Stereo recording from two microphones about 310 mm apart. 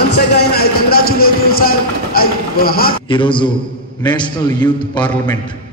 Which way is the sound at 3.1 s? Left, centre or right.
Centre.